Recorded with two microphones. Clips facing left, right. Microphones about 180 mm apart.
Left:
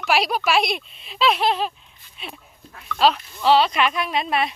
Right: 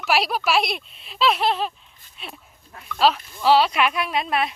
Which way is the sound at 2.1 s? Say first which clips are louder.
Left 2 dB; centre (ahead or behind).